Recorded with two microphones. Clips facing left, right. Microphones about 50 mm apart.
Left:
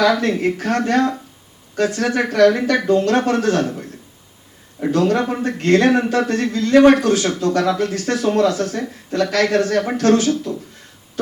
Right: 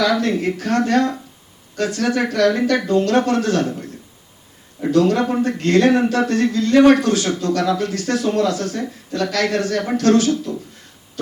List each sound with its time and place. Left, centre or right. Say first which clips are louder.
0.0 s a man's voice: left 2 dB; left